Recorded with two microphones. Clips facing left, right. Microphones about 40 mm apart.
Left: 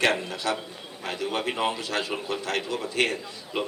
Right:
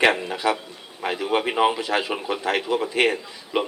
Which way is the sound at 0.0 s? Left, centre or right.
Right.